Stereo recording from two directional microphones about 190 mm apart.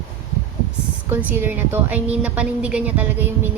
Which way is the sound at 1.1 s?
10° right (ahead or behind).